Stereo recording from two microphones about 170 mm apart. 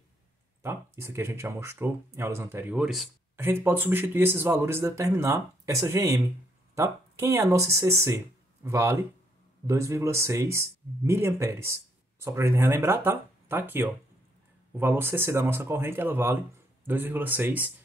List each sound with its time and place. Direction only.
0.6 s speech: 15° right (ahead or behind)
3.3 s speech: 15° right (ahead or behind)